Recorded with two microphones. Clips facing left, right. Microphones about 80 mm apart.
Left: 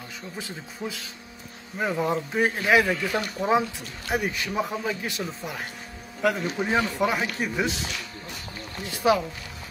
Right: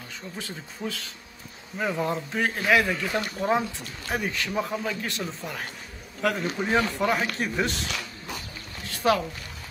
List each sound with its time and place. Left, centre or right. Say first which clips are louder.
0.8 s a man's voice: right 1 dB; centre
4.1 s a man's voice: left 1 dB; centre
8.9 s a man's voice: left 1 dB; centre